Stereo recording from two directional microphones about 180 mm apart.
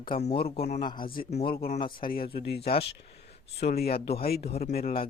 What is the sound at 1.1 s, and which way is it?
Speech, 55° left (ahead or behind).